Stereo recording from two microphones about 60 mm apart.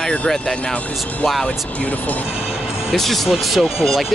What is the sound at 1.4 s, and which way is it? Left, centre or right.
Speech, left.